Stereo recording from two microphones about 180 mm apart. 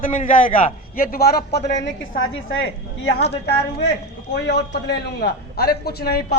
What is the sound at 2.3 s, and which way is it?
Speech, 90° left.